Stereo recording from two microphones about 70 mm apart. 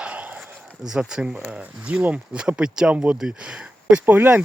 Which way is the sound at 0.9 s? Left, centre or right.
Centre.